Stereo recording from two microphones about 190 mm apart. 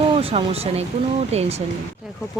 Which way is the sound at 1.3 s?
35° right (ahead or behind).